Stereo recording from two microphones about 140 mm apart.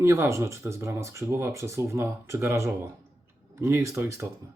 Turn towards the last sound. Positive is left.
turn(degrees=-20)  # may be behind; listen again after turning